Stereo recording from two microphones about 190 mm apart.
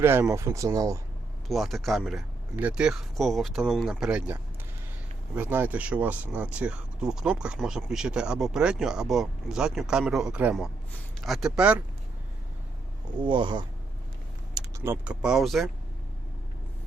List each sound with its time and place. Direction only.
0.0 s speech: 10° right (ahead or behind)
1.5 s speech: centre (ahead or behind)
13.2 s speech: 25° right (ahead or behind)
14.5 s speech: 10° right (ahead or behind)